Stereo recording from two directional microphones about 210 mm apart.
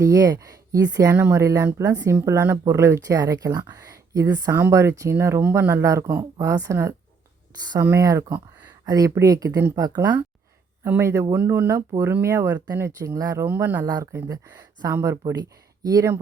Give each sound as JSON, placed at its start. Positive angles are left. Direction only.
{"t": 0.0, "sound": "speech", "side_deg": -15}